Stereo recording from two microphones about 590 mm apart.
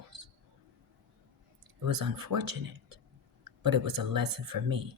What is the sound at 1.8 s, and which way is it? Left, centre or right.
Speech, right.